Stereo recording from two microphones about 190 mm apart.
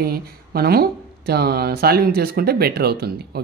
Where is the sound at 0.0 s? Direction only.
55° right (ahead or behind).